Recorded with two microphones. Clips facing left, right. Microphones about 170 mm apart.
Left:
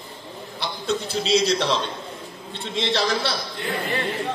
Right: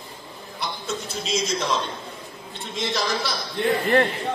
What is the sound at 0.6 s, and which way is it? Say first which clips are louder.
A man's voice: left 4 dB; 35° left (ahead or behind).